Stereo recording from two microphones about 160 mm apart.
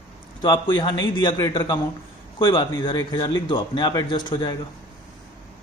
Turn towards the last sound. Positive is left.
turn(degrees=30)  # may be behind; listen again after turning